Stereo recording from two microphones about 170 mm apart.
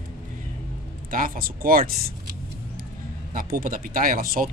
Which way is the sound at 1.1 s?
55° right (ahead or behind).